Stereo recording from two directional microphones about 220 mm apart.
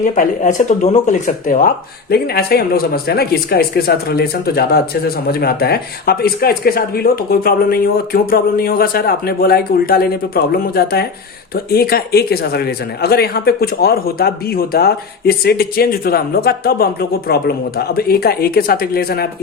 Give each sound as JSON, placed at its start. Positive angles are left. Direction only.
{"t": 0.0, "sound": "speech", "side_deg": 35}